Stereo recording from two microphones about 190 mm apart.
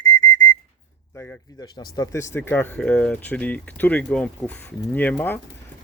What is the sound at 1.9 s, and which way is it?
Speech, 15° left (ahead or behind).